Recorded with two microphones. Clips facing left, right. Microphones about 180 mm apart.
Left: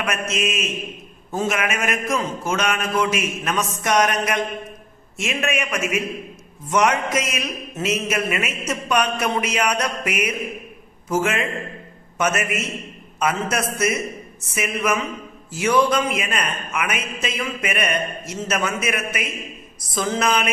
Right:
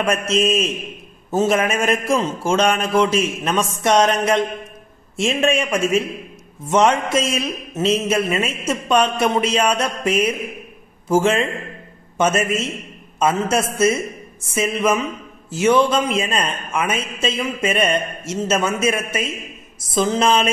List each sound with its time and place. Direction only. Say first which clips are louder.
0.0 s a man's voice: right 6 dB; 30° right (ahead or behind)